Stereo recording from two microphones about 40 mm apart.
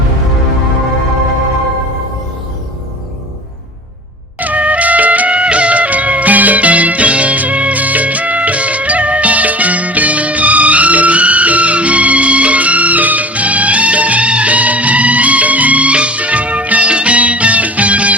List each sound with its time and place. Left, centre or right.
4.4 s music: right